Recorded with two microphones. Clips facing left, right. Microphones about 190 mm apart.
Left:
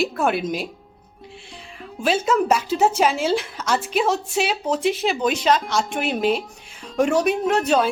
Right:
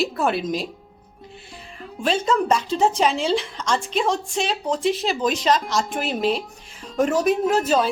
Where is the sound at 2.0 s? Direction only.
5° left (ahead or behind).